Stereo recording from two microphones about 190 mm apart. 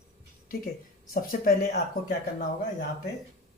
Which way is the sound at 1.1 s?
50° left (ahead or behind).